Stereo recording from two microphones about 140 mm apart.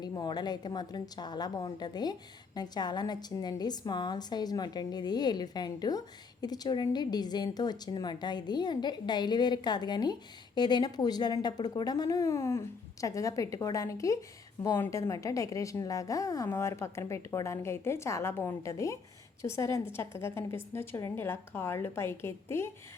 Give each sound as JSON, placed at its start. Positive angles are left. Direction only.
{"t": 0.0, "sound": "a woman's voice", "side_deg": 30}